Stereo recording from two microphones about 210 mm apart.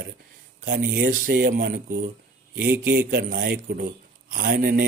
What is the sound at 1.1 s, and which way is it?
Speech, 45° right (ahead or behind).